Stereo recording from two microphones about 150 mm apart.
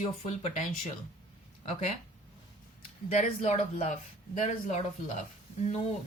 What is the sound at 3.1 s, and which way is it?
Speech, 45° left (ahead or behind).